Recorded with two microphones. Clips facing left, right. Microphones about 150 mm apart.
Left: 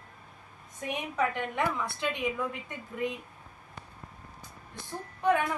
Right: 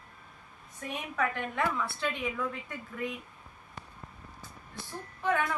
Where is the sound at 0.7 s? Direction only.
20° left (ahead or behind).